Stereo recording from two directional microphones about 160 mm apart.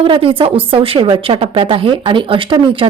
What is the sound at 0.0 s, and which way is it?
Speech, 35° right (ahead or behind).